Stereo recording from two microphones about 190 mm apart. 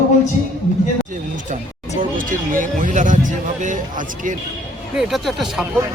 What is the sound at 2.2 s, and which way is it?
A man's voice, 45° right (ahead or behind).